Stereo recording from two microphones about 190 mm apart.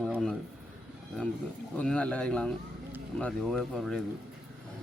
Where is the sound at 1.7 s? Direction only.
5° left (ahead or behind).